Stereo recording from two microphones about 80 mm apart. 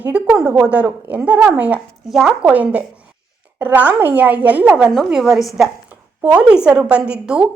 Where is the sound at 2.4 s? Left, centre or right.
Centre.